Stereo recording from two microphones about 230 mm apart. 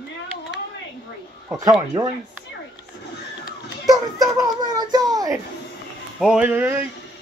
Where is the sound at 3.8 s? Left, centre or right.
Centre.